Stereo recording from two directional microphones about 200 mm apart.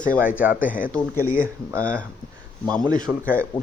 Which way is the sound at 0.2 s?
5° right (ahead or behind).